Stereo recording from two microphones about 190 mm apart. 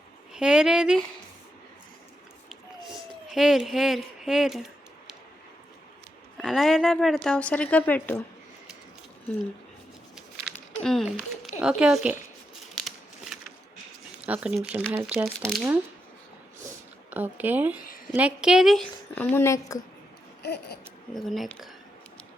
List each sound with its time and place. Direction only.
0.3 s a woman's voice: 5° right (ahead or behind)
3.2 s a woman's voice: centre (ahead or behind)
6.3 s a woman's voice: centre (ahead or behind)
10.2 s a sound: centre (ahead or behind)
11.6 s a woman's voice: 5° right (ahead or behind)
14.2 s speech: 5° right (ahead or behind)
15.4 s a woman's voice: centre (ahead or behind)
17.1 s a woman's voice: 10° right (ahead or behind); by 19.8 s 15° left (ahead or behind)
20.4 s a sound: 60° left (ahead or behind)
21.2 s a woman's voice: centre (ahead or behind)